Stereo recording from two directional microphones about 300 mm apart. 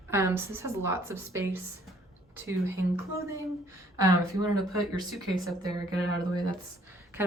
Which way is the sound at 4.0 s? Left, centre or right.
Centre.